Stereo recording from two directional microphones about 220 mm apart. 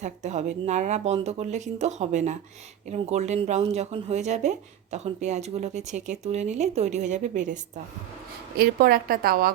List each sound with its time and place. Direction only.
0.0 s speech: 30° right (ahead or behind)